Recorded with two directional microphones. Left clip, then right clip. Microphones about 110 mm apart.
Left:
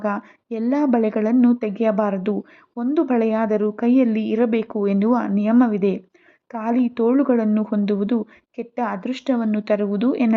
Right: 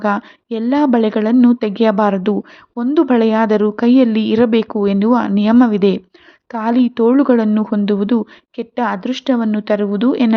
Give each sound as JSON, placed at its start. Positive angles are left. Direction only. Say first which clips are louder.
{"t": 0.0, "sound": "speech", "louder": "right 7 dB", "side_deg": -20}